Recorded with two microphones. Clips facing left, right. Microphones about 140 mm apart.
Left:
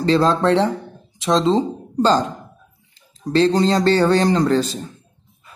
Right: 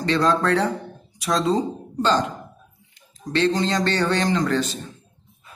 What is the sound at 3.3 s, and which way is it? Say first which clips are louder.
Speech: left 5 dB; 35° left (ahead or behind).